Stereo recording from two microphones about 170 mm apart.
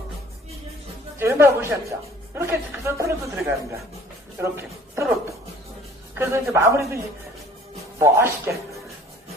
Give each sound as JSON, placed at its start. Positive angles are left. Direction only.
{"t": 1.1, "sound": "a woman's voice", "side_deg": -15}
{"t": 6.1, "sound": "a woman's voice", "side_deg": -15}
{"t": 8.0, "sound": "a woman's voice", "side_deg": -15}